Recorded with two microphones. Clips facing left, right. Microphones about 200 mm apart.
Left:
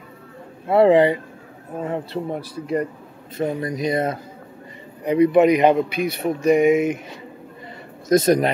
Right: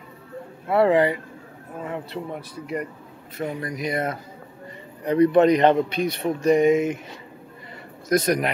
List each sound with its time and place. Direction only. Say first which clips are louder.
0.7 s speech: left 4 dB; 25° left (ahead or behind)
5.0 s a man's voice: left 2 dB; 10° left (ahead or behind)
8.1 s speech: left 5 dB; 25° left (ahead or behind)